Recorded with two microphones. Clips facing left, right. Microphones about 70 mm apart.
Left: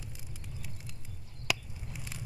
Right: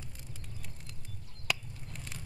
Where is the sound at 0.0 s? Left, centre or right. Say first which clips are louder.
Left 1 dB; centre.